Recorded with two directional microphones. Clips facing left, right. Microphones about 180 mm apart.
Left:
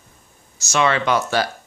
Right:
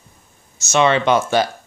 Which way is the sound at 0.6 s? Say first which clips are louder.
Right 4 dB; 20° right (ahead or behind).